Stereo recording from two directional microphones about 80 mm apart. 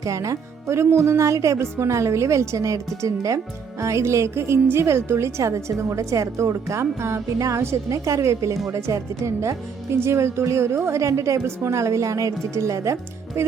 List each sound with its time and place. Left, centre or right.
0.0 s speech: right